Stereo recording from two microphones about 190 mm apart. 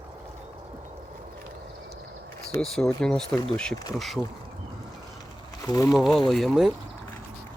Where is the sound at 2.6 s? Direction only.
5° left (ahead or behind).